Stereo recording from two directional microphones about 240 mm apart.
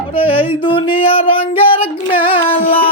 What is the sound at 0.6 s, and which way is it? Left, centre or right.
Singing, left.